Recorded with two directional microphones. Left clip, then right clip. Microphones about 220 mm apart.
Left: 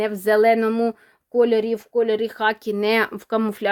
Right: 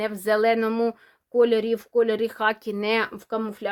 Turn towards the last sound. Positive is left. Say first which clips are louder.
# left 6 dB
turn(degrees=40)  # may be behind; listen again after turning